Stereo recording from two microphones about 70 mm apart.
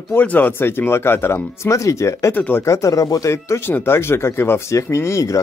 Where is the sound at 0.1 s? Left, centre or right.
Left.